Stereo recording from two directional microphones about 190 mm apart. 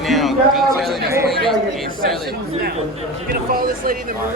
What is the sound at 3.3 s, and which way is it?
Speech, 50° right (ahead or behind).